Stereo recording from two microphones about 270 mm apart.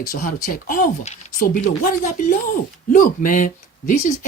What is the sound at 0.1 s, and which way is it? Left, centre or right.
Speech, left.